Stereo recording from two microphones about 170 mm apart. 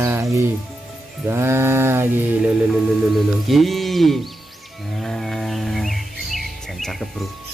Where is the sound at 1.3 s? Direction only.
15° right (ahead or behind).